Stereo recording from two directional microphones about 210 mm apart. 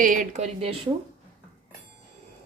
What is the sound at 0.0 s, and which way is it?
Speech, 40° right (ahead or behind).